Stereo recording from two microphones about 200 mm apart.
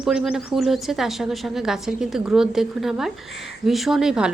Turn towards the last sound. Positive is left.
turn(degrees=-5)  # may be behind; listen again after turning